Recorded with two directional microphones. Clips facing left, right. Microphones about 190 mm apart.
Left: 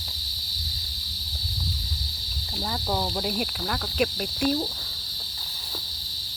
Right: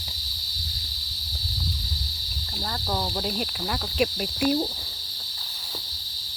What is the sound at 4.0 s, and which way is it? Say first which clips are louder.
Cricket: right 1 dB; 10° right (ahead or behind).